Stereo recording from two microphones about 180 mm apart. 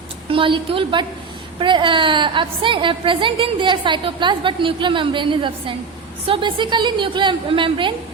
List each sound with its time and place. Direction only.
0.3 s a woman's voice: 30° right (ahead or behind)